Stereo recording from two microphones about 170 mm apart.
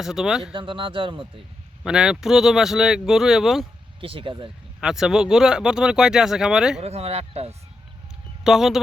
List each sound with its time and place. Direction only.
0.0 s speech: 5° right (ahead or behind)
0.5 s speech: 30° right (ahead or behind)
1.8 s speech: 5° right (ahead or behind)
4.0 s speech: 30° right (ahead or behind)
4.8 s speech: 5° right (ahead or behind)
6.7 s speech: 35° right (ahead or behind)
8.4 s speech: centre (ahead or behind)